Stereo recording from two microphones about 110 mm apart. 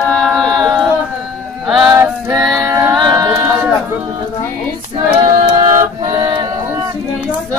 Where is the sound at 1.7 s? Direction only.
5° right (ahead or behind).